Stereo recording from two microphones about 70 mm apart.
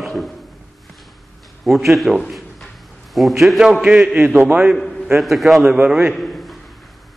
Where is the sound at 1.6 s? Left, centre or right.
Centre.